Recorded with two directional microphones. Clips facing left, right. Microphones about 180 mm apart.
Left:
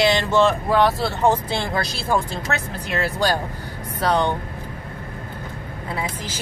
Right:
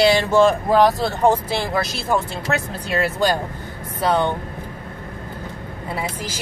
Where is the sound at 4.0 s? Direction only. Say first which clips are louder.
Right 1 dB; 5° right (ahead or behind).